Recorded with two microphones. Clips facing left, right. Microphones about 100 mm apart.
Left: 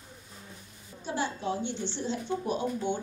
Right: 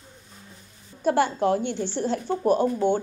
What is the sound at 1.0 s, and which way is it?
A woman's voice, 60° right (ahead or behind).